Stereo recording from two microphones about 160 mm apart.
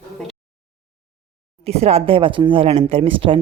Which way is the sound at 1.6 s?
40° right (ahead or behind).